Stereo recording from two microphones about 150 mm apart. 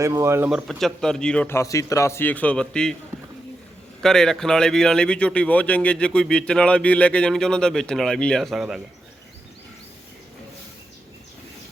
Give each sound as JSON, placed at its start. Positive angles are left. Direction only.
{"t": 0.0, "sound": "speech", "side_deg": -20}
{"t": 0.5, "sound": "speech", "side_deg": 0}
{"t": 1.5, "sound": "a man's voice", "side_deg": 20}
{"t": 4.0, "sound": "speech", "side_deg": 5}